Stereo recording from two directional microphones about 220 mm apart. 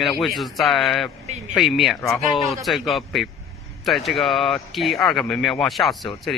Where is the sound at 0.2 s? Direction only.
Centre (ahead or behind).